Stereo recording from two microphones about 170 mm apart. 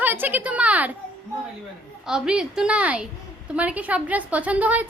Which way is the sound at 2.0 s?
5° right (ahead or behind).